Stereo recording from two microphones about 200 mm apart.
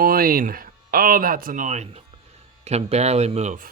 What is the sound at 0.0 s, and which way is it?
Speech, 45° right (ahead or behind).